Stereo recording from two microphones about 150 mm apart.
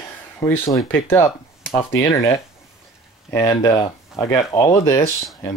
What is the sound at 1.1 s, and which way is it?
Speech, 20° left (ahead or behind).